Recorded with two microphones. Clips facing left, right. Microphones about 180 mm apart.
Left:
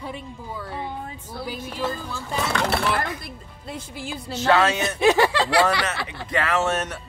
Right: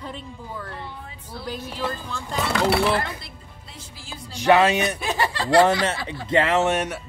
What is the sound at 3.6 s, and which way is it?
Speech, 60° left (ahead or behind).